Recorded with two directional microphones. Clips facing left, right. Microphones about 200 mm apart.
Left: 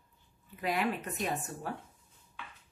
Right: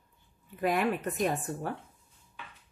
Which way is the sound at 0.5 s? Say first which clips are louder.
Right 4 dB; 50° right (ahead or behind).